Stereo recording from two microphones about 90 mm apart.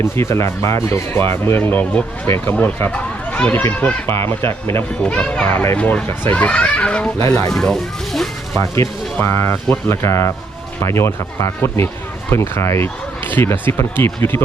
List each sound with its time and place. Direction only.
0.0 s speech: 30° left (ahead or behind)
5.0 s speech: 10° left (ahead or behind)
7.2 s speech: 40° left (ahead or behind)
7.5 s music: 5° left (ahead or behind)
8.6 s speech: 35° left (ahead or behind)
9.1 s speech: 25° left (ahead or behind)